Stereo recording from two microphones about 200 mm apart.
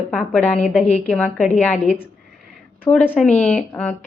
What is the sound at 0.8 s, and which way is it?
Speech, 35° left (ahead or behind).